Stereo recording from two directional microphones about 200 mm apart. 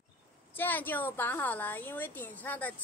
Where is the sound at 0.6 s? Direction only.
10° left (ahead or behind).